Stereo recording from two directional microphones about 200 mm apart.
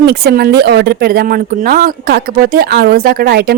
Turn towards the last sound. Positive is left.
turn(degrees=-50)  # may be behind; listen again after turning